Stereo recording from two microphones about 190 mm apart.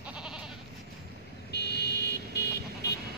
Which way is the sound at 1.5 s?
60° left (ahead or behind).